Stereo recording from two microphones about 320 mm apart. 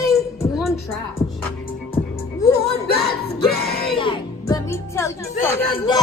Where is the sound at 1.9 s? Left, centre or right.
Centre.